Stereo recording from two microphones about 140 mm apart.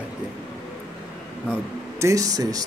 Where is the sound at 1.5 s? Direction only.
20° right (ahead or behind).